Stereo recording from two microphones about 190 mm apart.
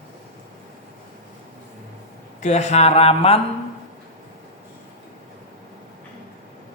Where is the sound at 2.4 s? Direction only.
35° left (ahead or behind).